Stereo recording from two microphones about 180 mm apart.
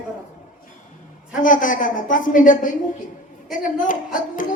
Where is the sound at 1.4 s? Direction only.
45° left (ahead or behind).